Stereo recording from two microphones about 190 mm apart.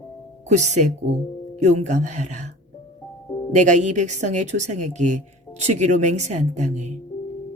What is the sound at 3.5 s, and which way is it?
Speech, 40° right (ahead or behind).